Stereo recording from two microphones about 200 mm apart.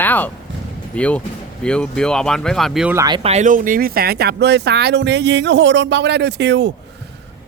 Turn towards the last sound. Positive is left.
turn(degrees=-60)  # may be behind; listen again after turning